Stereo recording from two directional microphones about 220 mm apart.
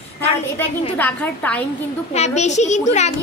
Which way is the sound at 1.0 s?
5° left (ahead or behind).